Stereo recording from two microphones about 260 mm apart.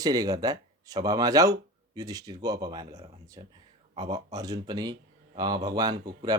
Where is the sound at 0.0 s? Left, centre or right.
Centre.